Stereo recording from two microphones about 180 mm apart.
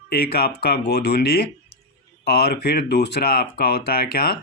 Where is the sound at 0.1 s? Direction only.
60° left (ahead or behind).